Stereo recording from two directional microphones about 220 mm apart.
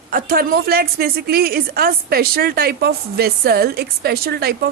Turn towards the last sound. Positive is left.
turn(degrees=-45)  # may be behind; listen again after turning